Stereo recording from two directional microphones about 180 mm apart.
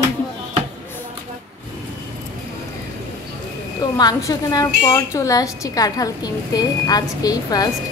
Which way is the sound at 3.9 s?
20° left (ahead or behind).